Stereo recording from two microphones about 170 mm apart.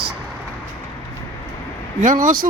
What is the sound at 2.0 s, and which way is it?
Speech, 50° right (ahead or behind).